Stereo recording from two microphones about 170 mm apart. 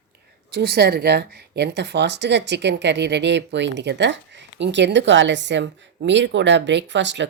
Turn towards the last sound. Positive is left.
turn(degrees=-90)